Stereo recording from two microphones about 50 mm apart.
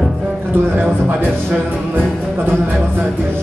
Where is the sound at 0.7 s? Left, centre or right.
Right.